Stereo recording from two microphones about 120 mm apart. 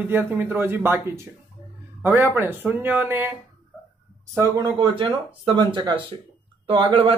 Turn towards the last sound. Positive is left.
turn(degrees=-45)  # may be behind; listen again after turning